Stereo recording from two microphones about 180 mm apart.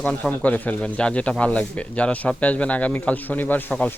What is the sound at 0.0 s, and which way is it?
Speech, 10° left (ahead or behind).